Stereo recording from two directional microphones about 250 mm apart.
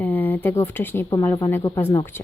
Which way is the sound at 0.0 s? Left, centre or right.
Centre.